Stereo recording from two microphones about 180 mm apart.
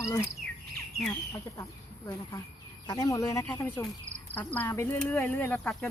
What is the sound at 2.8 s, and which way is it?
Speech, 20° left (ahead or behind).